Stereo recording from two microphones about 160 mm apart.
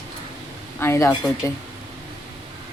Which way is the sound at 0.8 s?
15° left (ahead or behind).